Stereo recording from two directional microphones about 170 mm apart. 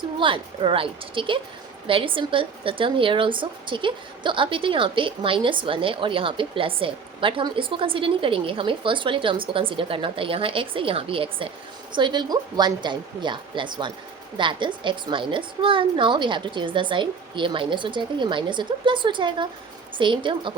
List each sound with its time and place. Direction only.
0.2 s a woman's voice: 30° right (ahead or behind)